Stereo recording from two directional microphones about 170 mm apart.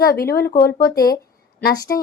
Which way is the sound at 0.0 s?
65° left (ahead or behind).